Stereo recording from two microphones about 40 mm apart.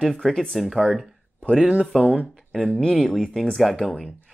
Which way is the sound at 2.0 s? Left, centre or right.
Right.